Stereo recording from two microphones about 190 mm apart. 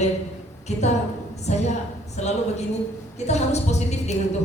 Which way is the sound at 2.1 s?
35° left (ahead or behind).